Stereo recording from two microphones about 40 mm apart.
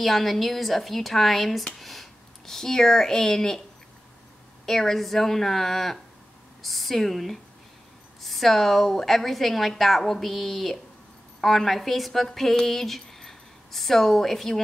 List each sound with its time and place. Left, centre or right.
0.0 s a woman's voice: centre
4.6 s a woman's voice: centre